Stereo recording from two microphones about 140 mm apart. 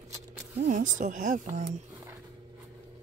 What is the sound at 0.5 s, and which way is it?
Speech, 60° right (ahead or behind).